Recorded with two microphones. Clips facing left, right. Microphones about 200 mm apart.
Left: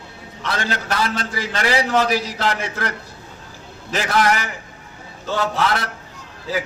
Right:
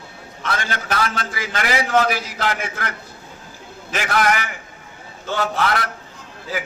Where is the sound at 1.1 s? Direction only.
35° left (ahead or behind).